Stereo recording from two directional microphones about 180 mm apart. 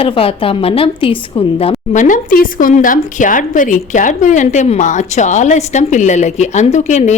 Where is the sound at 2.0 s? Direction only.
50° left (ahead or behind).